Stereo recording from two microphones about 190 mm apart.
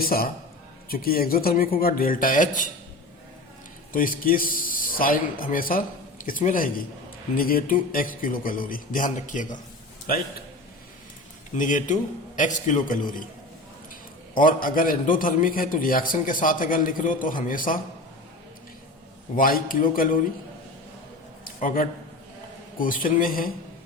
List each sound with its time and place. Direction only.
0.0 s a man's voice: 50° left (ahead or behind)
3.9 s a man's voice: 45° left (ahead or behind)
11.5 s a man's voice: 45° left (ahead or behind)
14.3 s a man's voice: 45° left (ahead or behind)
19.4 s a man's voice: 50° left (ahead or behind)
21.4 s a sound: 45° left (ahead or behind)
22.8 s a man's voice: 45° left (ahead or behind)